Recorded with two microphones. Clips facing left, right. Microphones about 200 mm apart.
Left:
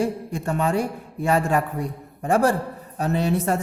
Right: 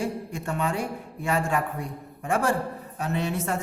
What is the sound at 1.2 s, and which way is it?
Speech, 40° left (ahead or behind).